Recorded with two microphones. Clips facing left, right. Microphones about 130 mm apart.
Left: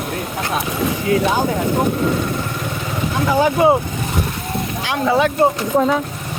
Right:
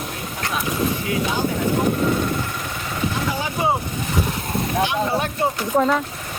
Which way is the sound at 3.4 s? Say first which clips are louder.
Left 10 dB; 80° left.